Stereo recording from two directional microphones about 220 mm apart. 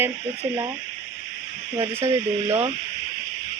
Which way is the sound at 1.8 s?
10° right (ahead or behind).